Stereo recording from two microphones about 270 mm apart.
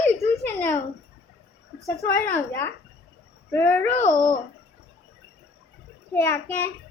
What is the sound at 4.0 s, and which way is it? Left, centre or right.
Speech, left.